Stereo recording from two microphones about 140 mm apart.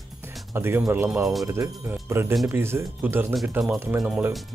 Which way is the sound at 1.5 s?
20° right (ahead or behind).